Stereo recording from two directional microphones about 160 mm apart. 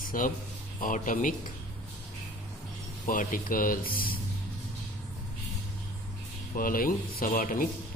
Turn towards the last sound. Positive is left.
turn(degrees=55)  # may be behind; listen again after turning